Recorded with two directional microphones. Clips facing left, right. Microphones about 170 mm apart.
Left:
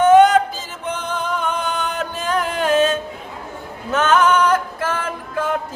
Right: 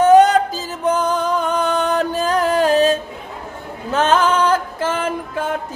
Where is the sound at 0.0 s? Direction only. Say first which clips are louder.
Right 1 dB; 35° right (ahead or behind).